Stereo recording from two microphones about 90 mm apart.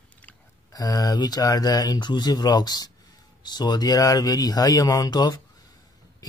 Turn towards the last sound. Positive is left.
turn(degrees=50)  # may be behind; listen again after turning